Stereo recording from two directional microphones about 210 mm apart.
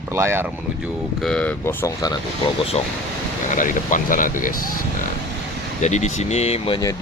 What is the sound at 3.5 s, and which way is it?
Speech, 40° left (ahead or behind).